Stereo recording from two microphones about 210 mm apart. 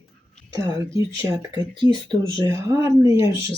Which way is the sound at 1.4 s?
20° right (ahead or behind).